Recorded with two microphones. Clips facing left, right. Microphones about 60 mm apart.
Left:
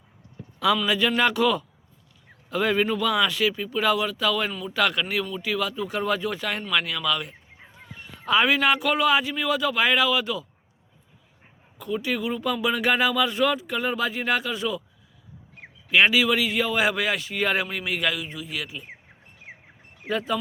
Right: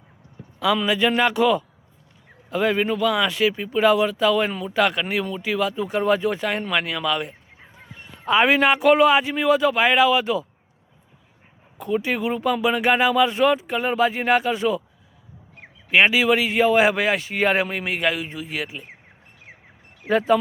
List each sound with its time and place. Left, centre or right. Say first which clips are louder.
0.9 s speech: right 2 dB; centre
3.3 s speech: right 4 dB; right
7.6 s a sound: even; centre
8.3 s speech: right 3 dB; right
11.8 s speech: right 4 dB; right
15.9 s speech: right 3 dB; right
19.5 s a sound: left 2 dB; left
20.1 s speech: right 8 dB; right